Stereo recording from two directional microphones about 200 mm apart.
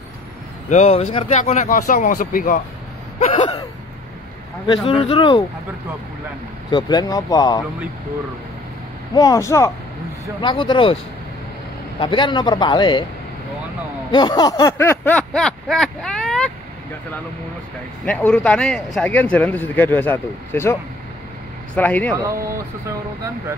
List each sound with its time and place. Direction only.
0.7 s speech: 35° left (ahead or behind)
3.2 s a sound: 35° left (ahead or behind)
4.6 s a man's voice: 25° left (ahead or behind)
6.7 s a man's voice: 20° left (ahead or behind)
9.1 s a man's voice: 20° left (ahead or behind)
12.0 s a man's voice: 25° left (ahead or behind)
14.1 s a sound: 20° left (ahead or behind); by 16.5 s 5° left (ahead or behind)
18.0 s a man's voice: 5° left (ahead or behind)
21.7 s a man's voice: 10° left (ahead or behind)
22.1 s speech: 15° right (ahead or behind)